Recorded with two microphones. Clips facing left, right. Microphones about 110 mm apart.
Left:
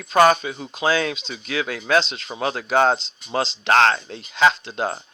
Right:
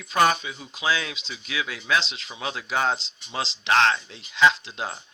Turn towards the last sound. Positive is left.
turn(degrees=50)  # may be behind; listen again after turning